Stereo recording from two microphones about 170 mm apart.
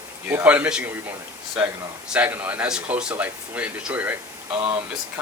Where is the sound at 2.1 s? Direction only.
10° right (ahead or behind).